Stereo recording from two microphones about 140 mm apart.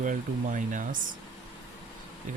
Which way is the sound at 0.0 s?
65° right (ahead or behind).